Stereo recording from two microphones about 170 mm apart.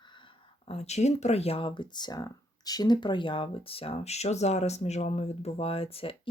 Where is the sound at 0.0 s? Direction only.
30° left (ahead or behind).